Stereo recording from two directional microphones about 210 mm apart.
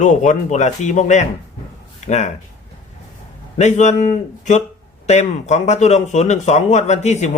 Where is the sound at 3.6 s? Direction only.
35° left (ahead or behind).